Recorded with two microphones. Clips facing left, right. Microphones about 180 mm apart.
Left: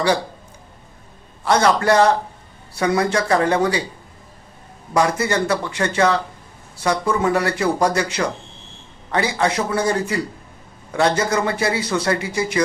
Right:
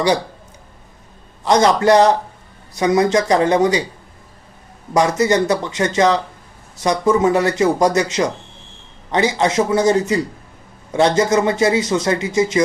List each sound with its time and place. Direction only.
1.5 s speech: 20° right (ahead or behind)
4.9 s speech: 20° right (ahead or behind)